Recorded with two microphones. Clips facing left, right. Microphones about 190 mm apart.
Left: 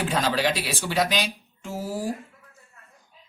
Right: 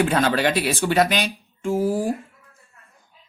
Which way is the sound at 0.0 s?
60° right (ahead or behind).